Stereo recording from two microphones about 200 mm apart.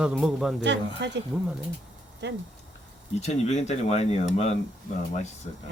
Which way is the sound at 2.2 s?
60° right (ahead or behind).